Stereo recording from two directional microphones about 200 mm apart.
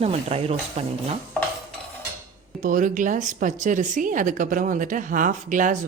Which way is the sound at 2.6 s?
40° right (ahead or behind).